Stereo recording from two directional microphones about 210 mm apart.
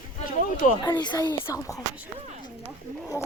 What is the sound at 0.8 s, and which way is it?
Speech, 20° left (ahead or behind).